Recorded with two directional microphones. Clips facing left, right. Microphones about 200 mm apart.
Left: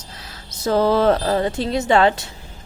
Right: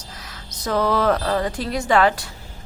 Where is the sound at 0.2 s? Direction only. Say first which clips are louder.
Left 6 dB; 30° left (ahead or behind).